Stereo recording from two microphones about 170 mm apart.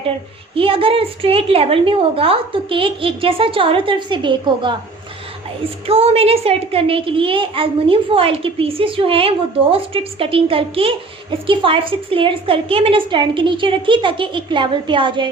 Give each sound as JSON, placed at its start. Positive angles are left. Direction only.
{"t": 0.5, "sound": "a child's voice", "side_deg": -30}
{"t": 5.8, "sound": "a child's voice", "side_deg": -35}